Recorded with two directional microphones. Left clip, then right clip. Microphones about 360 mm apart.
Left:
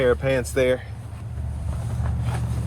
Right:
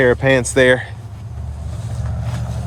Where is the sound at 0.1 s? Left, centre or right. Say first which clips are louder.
Right 7 dB; right.